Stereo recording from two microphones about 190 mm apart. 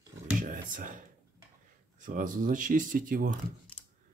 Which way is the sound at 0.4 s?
45° right (ahead or behind).